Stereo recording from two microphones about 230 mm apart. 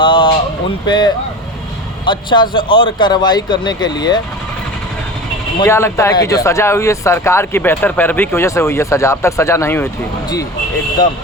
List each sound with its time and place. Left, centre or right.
0.0 s a sound: left
0.9 s speech: centre
5.5 s speech: centre